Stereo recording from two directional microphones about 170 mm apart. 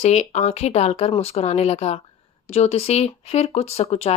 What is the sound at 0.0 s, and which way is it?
Speech, 40° left (ahead or behind).